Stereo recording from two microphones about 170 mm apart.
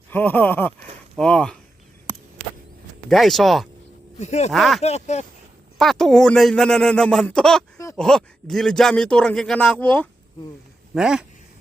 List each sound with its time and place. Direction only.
0.1 s a sound: 10° left (ahead or behind)
1.1 s speech: 5° left (ahead or behind)
3.1 s a man's voice: centre (ahead or behind)
4.2 s speech: 40° left (ahead or behind)
4.5 s a man's voice: centre (ahead or behind)
4.8 s speech: 40° left (ahead or behind)
5.8 s a man's voice: centre (ahead or behind)
10.9 s a man's voice: 5° right (ahead or behind)